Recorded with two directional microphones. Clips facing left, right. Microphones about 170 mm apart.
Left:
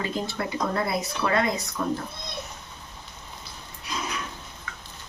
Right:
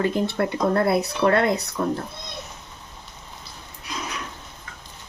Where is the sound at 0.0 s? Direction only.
60° right (ahead or behind).